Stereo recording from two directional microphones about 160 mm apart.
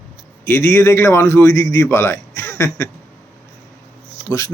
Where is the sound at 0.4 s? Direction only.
15° left (ahead or behind).